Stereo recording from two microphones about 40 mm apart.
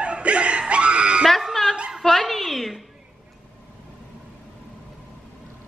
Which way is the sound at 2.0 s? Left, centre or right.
Centre.